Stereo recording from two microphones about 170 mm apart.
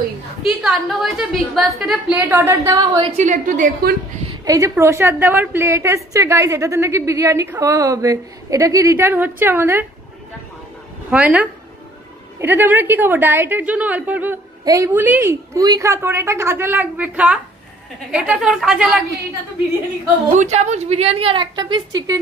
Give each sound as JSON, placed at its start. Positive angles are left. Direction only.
{"t": 0.4, "sound": "a woman's voice", "side_deg": 0}
{"t": 3.2, "sound": "a woman's voice", "side_deg": -45}
{"t": 4.5, "sound": "a woman's voice", "side_deg": -20}
{"t": 11.1, "sound": "a woman's voice", "side_deg": -10}
{"t": 20.2, "sound": "a woman's voice", "side_deg": -40}